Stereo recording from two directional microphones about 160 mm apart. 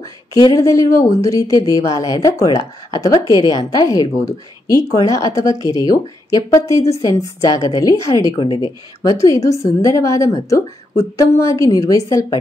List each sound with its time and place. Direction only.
0.3 s a woman's voice: 20° left (ahead or behind)